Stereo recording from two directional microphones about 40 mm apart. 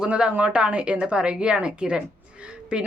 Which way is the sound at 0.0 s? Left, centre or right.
Right.